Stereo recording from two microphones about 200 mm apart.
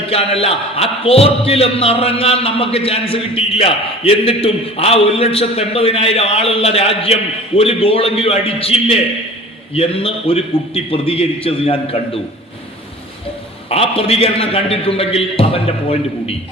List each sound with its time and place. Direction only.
0.1 s a man's voice: 30° left (ahead or behind)
13.7 s a man's voice: 30° left (ahead or behind)